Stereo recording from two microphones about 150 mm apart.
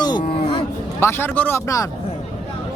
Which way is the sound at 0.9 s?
15° left (ahead or behind).